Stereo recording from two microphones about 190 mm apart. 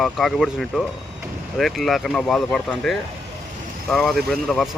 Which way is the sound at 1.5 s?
Centre (ahead or behind).